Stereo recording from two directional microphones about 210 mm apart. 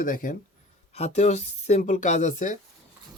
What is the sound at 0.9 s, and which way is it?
Speech, 30° left (ahead or behind).